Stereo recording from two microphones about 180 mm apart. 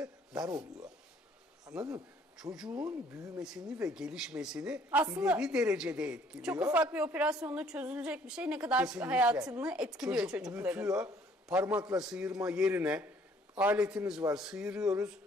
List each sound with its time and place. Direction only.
1.7 s a woman's voice: 5° right (ahead or behind)
11.4 s a woman's voice: 15° right (ahead or behind)
12.0 s a woman's voice: 5° right (ahead or behind)